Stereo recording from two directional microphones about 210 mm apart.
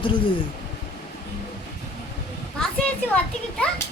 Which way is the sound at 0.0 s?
25° left (ahead or behind).